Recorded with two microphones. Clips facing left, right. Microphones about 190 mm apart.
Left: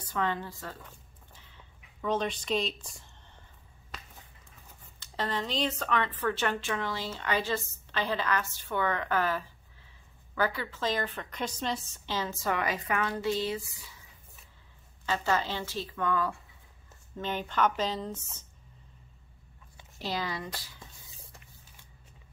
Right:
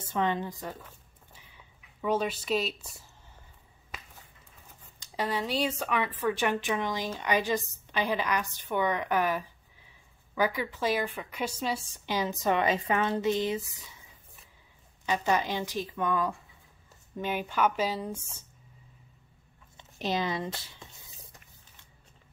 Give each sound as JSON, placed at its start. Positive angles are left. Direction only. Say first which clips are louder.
{"t": 0.1, "sound": "speech", "louder": "right 3 dB", "side_deg": -20}
{"t": 0.8, "sound": "a sound", "louder": "even", "side_deg": -10}
{"t": 5.0, "sound": "speech", "louder": "right 2 dB", "side_deg": -10}
{"t": 15.0, "sound": "speech", "louder": "right 2 dB", "side_deg": -15}
{"t": 20.0, "sound": "speech", "louder": "right 4 dB", "side_deg": -20}